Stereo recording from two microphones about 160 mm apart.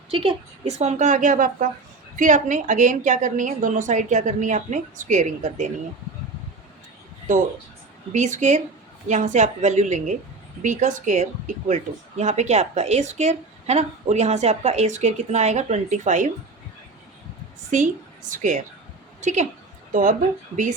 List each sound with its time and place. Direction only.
0.1 s speech: 35° right (ahead or behind); by 5.6 s 50° right (ahead or behind)
7.3 s speech: 50° right (ahead or behind)
18.3 s a woman's voice: 50° right (ahead or behind)